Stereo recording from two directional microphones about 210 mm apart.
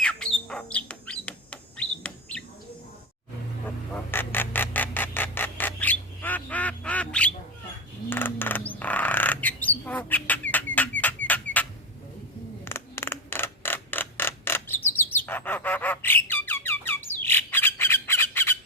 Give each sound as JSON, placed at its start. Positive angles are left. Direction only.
{"t": 0.0, "sound": "bird", "side_deg": 5}
{"t": 3.9, "sound": "a sound", "side_deg": 10}
{"t": 8.1, "sound": "bird", "side_deg": 10}
{"t": 12.6, "sound": "mechanisms", "side_deg": 10}